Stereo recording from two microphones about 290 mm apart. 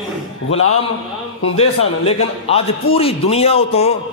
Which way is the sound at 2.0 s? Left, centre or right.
Left.